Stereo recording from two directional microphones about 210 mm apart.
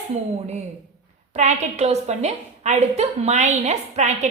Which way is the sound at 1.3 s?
30° right (ahead or behind).